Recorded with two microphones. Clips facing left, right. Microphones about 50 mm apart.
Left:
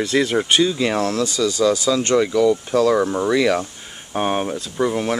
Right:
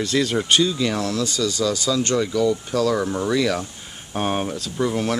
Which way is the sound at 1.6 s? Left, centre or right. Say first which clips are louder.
Left 5 dB; left.